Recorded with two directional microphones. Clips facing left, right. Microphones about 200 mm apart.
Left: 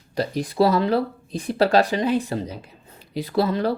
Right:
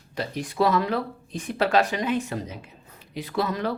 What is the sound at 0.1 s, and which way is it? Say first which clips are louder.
Speech: left 6 dB; 35° left (ahead or behind).